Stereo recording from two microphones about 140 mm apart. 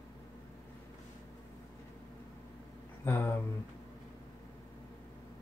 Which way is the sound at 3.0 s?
15° left (ahead or behind).